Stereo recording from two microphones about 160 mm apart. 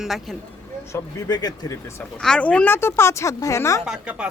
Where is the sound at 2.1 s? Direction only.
5° left (ahead or behind).